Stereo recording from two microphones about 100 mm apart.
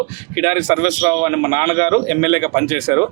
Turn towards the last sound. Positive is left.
turn(degrees=-25)  # may be behind; listen again after turning